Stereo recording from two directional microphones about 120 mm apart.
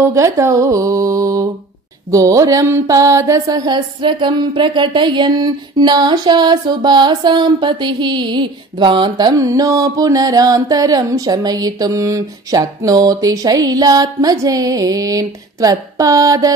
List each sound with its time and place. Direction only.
0.1 s music: 25° right (ahead or behind)
2.0 s mantra: 25° right (ahead or behind)